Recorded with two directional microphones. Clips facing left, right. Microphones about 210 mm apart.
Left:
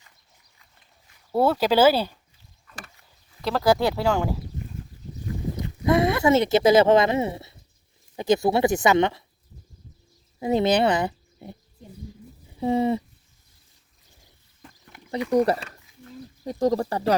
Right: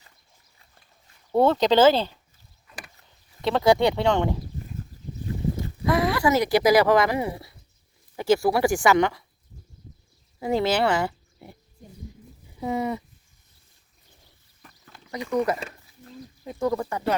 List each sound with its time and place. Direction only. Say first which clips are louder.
1.3 s speech: right 1 dB; 5° left (ahead or behind)
3.4 s speech: right 2 dB; centre (ahead or behind)
5.8 s speech: left 2 dB; 20° left (ahead or behind)
10.4 s speech: left 2 dB; 20° left (ahead or behind)
12.5 s speech: left 5 dB; 30° left (ahead or behind)
14.6 s a sound: left 3 dB; 15° left (ahead or behind)
15.3 s speech: left 3 dB; 35° left (ahead or behind)